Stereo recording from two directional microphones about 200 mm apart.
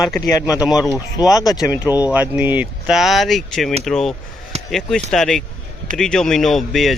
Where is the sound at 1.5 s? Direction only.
5° right (ahead or behind).